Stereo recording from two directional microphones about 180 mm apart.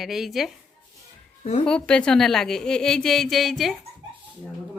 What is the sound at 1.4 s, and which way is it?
Speech, 40° left (ahead or behind).